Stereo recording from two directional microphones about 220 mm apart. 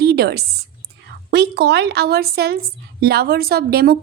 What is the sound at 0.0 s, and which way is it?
A woman's voice, 45° right (ahead or behind).